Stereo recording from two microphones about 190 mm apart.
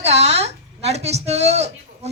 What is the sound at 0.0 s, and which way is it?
A woman's voice, 35° right (ahead or behind).